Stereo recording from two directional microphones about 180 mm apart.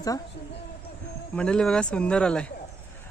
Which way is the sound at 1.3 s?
5° left (ahead or behind).